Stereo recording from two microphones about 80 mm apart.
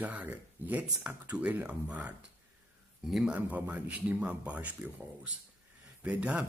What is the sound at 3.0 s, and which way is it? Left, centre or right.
Speech, centre.